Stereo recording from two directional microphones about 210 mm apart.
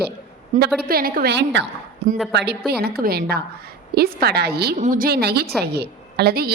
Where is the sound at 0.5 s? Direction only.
35° right (ahead or behind).